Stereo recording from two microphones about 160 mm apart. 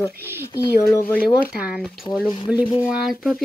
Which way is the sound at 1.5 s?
5° right (ahead or behind).